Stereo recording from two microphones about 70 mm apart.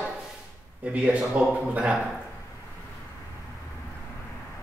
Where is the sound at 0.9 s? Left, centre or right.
Centre.